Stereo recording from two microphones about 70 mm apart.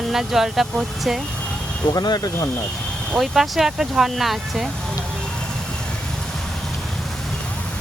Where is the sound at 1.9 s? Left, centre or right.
Left.